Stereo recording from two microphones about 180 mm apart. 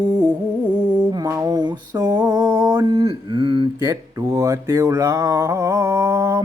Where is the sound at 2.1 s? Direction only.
20° right (ahead or behind).